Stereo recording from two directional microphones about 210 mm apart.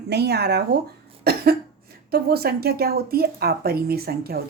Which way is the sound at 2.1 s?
50° right (ahead or behind).